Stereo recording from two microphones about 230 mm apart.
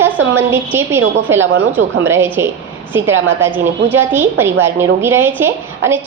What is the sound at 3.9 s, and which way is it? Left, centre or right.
A woman's voice, centre.